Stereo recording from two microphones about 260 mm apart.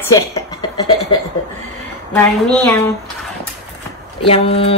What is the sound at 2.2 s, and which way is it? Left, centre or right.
Speech, centre.